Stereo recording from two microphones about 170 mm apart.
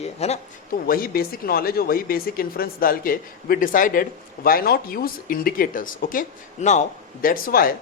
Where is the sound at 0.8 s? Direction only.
60° left (ahead or behind).